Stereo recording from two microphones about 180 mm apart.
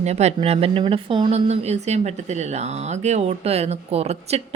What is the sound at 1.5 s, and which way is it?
Speech, 40° right (ahead or behind).